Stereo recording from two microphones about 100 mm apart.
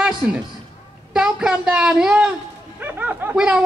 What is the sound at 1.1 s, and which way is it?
A woman's voice, 10° right (ahead or behind).